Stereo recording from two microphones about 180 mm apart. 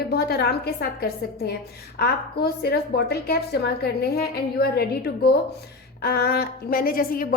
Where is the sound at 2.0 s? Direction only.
60° left (ahead or behind).